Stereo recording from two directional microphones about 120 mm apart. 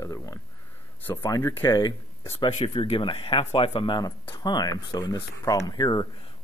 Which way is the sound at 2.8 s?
45° left (ahead or behind).